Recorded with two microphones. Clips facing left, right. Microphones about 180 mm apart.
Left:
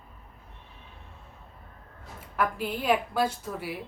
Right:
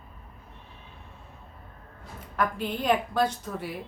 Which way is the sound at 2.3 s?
5° left (ahead or behind).